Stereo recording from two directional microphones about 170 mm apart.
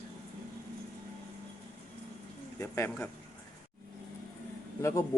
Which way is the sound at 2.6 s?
15° left (ahead or behind).